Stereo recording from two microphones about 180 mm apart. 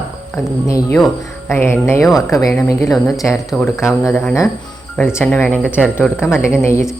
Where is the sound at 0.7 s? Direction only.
20° left (ahead or behind).